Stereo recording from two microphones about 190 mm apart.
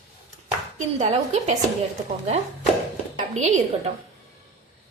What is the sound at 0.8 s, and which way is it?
Speech, 35° right (ahead or behind).